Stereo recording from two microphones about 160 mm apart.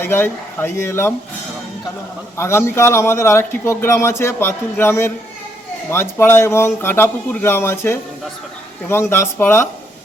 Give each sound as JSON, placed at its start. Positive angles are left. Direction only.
{"t": 0.0, "sound": "a man's voice", "side_deg": 15}
{"t": 2.4, "sound": "a man's voice", "side_deg": 15}